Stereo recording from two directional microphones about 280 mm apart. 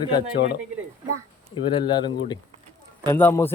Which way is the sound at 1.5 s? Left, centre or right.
Centre.